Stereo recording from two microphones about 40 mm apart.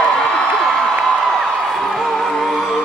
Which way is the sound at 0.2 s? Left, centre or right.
Centre.